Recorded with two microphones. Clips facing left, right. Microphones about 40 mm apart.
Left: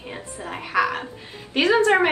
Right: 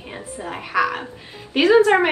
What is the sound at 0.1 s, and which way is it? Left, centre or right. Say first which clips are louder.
A woman's voice: right 3 dB; centre.